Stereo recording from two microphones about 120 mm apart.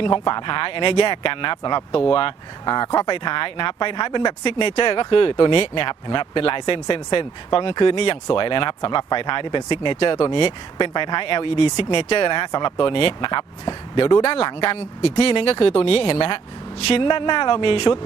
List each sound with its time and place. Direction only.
0.0 s speech: 40° left (ahead or behind)